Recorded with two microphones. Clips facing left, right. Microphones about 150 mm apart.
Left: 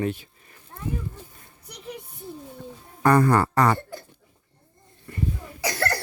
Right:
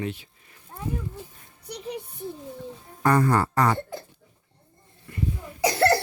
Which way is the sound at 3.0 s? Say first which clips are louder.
Left 2 dB; 70° left (ahead or behind).